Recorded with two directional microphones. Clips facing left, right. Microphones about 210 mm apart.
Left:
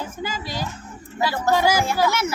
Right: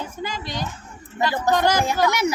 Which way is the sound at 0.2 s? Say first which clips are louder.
Even; 5° left (ahead or behind).